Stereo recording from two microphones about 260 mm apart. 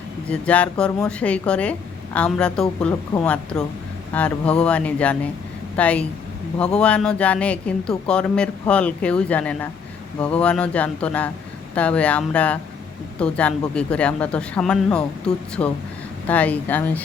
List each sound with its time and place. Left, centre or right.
0.3 s speech: centre